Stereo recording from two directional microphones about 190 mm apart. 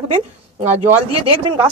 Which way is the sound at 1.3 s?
25° right (ahead or behind).